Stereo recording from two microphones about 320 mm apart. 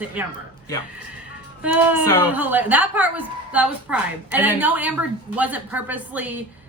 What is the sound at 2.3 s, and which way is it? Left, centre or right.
A woman's voice, centre.